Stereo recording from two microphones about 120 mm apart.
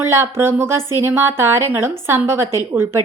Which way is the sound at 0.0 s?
20° right (ahead or behind).